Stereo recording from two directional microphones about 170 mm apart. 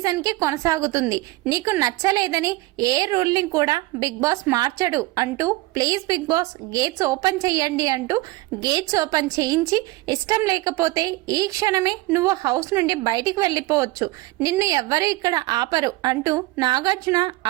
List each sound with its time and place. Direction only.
0.0 s a woman's voice: 20° right (ahead or behind)